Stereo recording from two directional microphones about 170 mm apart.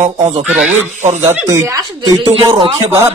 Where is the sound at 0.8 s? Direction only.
45° right (ahead or behind).